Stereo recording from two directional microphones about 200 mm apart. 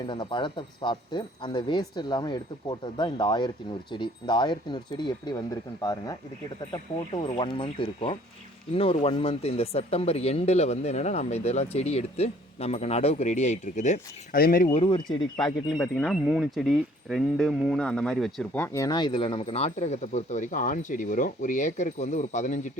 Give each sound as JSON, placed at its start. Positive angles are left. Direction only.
{"t": 0.0, "sound": "speech", "side_deg": 25}
{"t": 15.8, "sound": "speech", "side_deg": 0}